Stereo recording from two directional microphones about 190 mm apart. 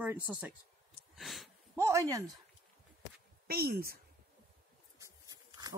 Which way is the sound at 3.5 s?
55° right (ahead or behind).